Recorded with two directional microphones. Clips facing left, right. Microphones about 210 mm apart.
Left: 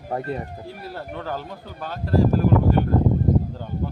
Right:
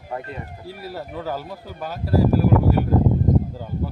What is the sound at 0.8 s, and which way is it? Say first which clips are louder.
A man's voice: right 3 dB; 5° right (ahead or behind).